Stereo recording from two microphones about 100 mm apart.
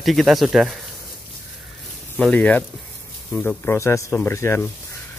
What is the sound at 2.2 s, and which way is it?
Speech, 10° left (ahead or behind).